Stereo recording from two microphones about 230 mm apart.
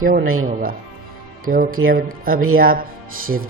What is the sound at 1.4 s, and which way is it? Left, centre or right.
Speech, right.